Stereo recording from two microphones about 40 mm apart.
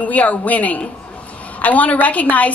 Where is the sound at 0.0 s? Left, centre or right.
Left.